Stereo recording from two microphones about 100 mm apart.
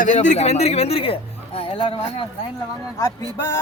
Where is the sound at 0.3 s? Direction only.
90° left; by 2.2 s 60° left (ahead or behind).